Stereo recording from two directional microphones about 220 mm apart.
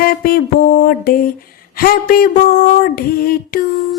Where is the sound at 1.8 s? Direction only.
40° left (ahead or behind).